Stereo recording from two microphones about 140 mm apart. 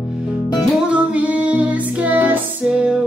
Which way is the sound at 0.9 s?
10° right (ahead or behind).